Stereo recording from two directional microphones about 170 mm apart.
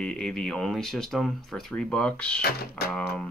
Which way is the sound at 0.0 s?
5° left (ahead or behind).